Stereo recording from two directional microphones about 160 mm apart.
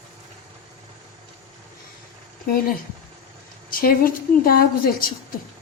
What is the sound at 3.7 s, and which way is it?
A woman's voice, 65° left (ahead or behind).